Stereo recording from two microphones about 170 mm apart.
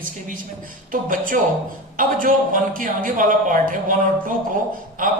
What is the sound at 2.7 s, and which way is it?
Speech, 50° right (ahead or behind).